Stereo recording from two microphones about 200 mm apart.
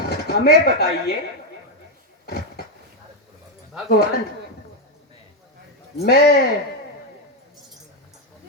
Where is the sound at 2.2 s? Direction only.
50° left (ahead or behind).